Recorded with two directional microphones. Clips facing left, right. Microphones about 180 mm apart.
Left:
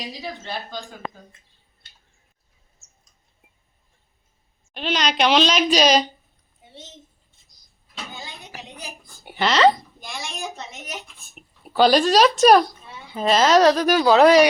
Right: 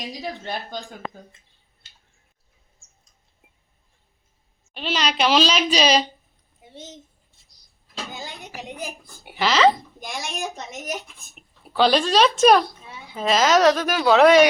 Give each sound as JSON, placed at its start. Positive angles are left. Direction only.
{"t": 2.7, "sound": "bird", "side_deg": -30}
{"t": 4.7, "sound": "speech", "side_deg": 0}
{"t": 9.2, "sound": "speech", "side_deg": 0}
{"t": 10.1, "sound": "a woman's voice", "side_deg": -15}
{"t": 11.3, "sound": "speech", "side_deg": 5}
{"t": 12.8, "sound": "a sound", "side_deg": -5}
{"t": 13.6, "sound": "speech", "side_deg": 0}